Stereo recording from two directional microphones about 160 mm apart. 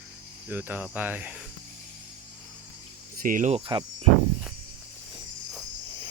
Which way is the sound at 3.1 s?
60° right (ahead or behind).